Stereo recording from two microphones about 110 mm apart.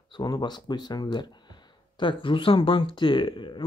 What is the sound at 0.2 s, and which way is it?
Speech, 40° left (ahead or behind).